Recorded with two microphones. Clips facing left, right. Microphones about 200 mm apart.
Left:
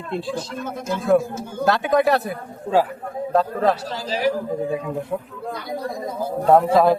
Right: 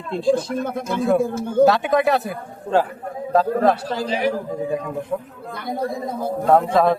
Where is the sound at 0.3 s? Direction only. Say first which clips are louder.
Right 5 dB; 55° right (ahead or behind).